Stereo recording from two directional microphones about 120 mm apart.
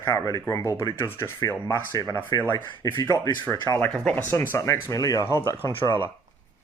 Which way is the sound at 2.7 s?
35° left (ahead or behind).